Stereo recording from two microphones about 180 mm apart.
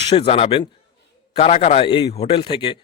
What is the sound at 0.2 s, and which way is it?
A man's voice, 35° left (ahead or behind).